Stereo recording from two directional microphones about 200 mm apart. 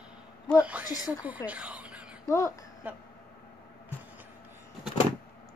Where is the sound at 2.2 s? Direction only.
15° left (ahead or behind).